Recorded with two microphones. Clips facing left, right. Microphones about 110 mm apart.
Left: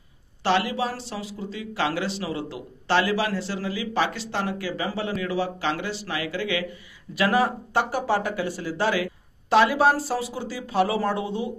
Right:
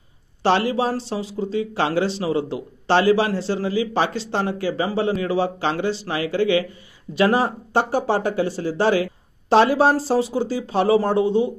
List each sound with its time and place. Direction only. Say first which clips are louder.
0.4 s speech: right 4 dB; 35° right (ahead or behind)